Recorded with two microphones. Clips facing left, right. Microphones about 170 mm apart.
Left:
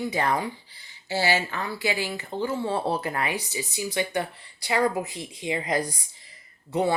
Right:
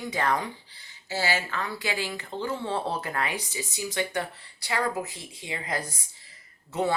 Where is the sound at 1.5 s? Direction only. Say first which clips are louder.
Left 3 dB; 15° left (ahead or behind).